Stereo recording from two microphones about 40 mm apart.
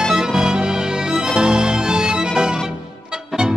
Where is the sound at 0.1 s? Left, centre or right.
Centre.